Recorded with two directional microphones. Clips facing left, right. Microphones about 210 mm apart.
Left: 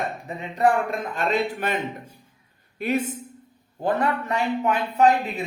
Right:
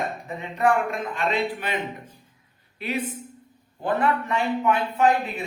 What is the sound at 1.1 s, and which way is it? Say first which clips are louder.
Speech: left 2 dB; 45° left (ahead or behind).